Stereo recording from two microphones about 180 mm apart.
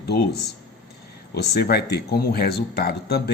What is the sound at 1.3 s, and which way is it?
Speech, 60° left (ahead or behind).